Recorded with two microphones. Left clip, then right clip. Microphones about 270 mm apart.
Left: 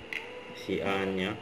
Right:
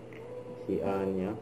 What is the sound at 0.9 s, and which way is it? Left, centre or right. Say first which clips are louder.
Speech: left 2 dB; left.